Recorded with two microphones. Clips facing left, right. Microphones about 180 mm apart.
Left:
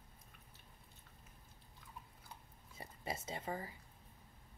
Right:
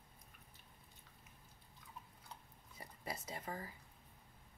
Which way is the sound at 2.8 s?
25° left (ahead or behind).